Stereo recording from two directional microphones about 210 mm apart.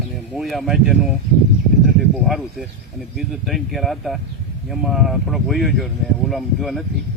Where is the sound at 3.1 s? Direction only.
Centre (ahead or behind).